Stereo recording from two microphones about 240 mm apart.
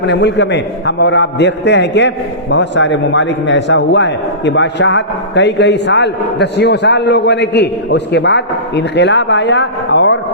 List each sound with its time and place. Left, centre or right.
0.1 s a man's voice: left